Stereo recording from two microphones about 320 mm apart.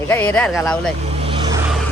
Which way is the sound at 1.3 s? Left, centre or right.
Centre.